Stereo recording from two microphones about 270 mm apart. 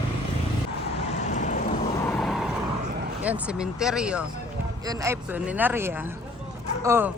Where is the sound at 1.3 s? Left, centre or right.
Left.